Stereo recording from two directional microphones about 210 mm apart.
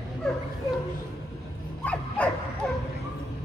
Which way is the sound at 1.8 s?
5° left (ahead or behind).